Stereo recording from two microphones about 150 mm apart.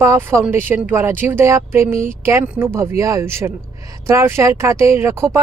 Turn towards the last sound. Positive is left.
turn(degrees=-20)  # may be behind; listen again after turning